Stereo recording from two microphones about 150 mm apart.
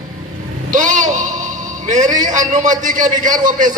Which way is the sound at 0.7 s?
60° right (ahead or behind).